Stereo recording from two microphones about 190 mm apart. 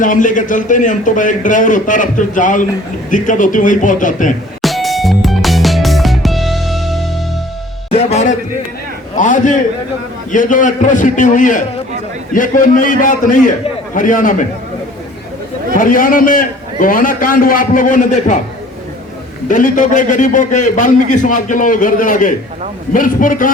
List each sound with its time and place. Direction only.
0.0 s a man's voice: 45° left (ahead or behind)
4.6 s music: centre (ahead or behind)
7.9 s music: 35° left (ahead or behind)
9.1 s a sound: 40° left (ahead or behind)
10.3 s a man's voice: 45° left (ahead or behind)
15.8 s a man's voice: 45° left (ahead or behind)
19.5 s a man's voice: 45° left (ahead or behind)